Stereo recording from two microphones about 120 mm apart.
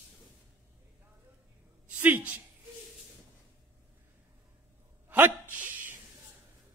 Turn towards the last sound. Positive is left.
turn(degrees=-15)  # may be behind; listen again after turning